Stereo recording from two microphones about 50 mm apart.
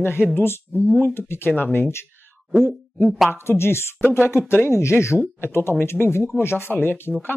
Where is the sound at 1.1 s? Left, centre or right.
Left.